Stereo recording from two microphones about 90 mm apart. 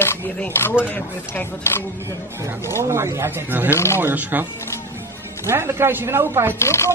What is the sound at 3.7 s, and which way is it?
Speech, 30° left (ahead or behind).